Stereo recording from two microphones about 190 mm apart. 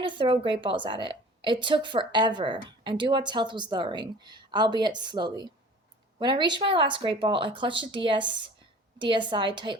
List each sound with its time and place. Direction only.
0.0 s a woman's voice: 25° right (ahead or behind)